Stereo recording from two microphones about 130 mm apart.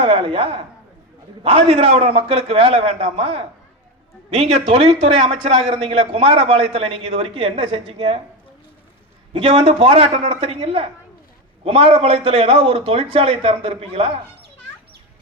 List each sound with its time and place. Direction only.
0.0 s a man's voice: 45° right (ahead or behind)
9.3 s a man's voice: 50° right (ahead or behind)